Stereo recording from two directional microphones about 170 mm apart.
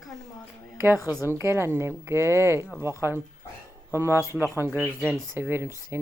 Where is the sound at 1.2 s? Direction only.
15° right (ahead or behind).